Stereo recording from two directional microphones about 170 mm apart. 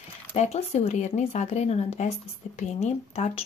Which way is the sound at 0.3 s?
40° left (ahead or behind).